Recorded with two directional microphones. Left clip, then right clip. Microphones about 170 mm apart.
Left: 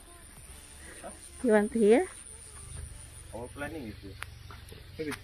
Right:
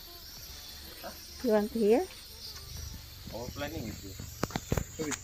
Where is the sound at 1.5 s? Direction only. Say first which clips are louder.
Left 3 dB; 35° left (ahead or behind).